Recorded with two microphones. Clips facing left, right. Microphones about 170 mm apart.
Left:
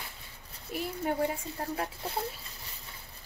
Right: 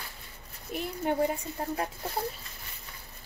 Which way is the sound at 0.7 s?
Centre (ahead or behind).